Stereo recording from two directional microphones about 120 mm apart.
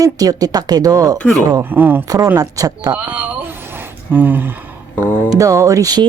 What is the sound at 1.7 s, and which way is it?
Speech, 15° right (ahead or behind).